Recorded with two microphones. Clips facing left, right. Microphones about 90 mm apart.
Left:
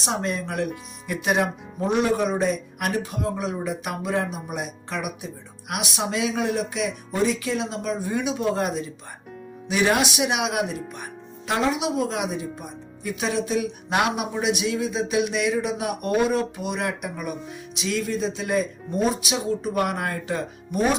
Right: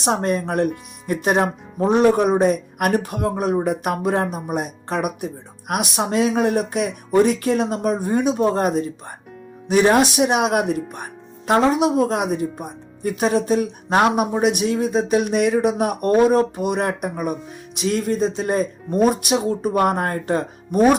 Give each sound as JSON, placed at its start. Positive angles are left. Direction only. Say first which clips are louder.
{"t": 0.0, "sound": "speech", "louder": "right 6 dB", "side_deg": -50}